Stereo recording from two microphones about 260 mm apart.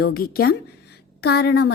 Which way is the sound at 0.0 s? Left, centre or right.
Left.